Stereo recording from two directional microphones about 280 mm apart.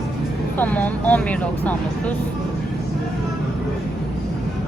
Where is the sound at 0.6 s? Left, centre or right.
Centre.